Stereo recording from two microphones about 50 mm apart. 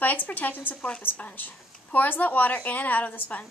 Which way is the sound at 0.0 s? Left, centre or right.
Left.